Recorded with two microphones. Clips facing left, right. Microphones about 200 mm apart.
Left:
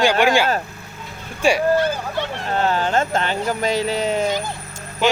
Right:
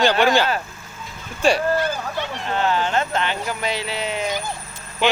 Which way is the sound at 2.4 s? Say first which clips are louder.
Left 1 dB; 40° left (ahead or behind).